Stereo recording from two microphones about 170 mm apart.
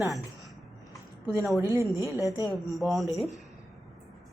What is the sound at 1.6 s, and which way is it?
Speech, 20° right (ahead or behind).